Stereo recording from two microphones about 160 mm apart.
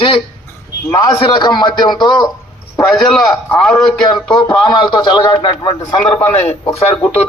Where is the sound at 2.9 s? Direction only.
Centre (ahead or behind).